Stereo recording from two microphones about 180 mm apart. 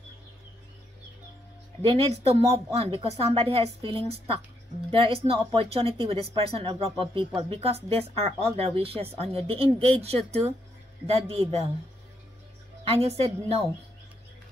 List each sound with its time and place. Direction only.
1.9 s speech: 35° right (ahead or behind)
12.9 s speech: 35° right (ahead or behind)